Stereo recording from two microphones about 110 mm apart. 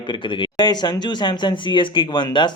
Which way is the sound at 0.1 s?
45° left (ahead or behind).